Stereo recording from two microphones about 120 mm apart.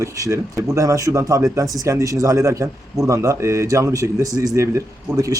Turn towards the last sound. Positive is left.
turn(degrees=-30)  # may be behind; listen again after turning